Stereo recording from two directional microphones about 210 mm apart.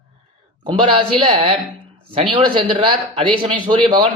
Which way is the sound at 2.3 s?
20° right (ahead or behind).